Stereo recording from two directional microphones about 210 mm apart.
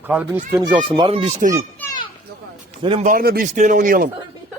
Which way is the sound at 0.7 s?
25° right (ahead or behind).